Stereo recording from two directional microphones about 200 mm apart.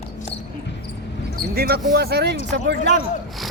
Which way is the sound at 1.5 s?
50° right (ahead or behind).